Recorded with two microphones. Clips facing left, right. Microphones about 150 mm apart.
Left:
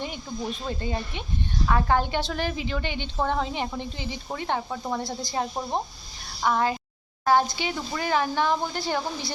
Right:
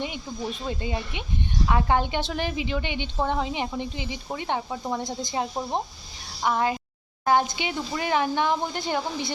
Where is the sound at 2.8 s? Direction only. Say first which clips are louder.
Right 1 dB; 45° left (ahead or behind).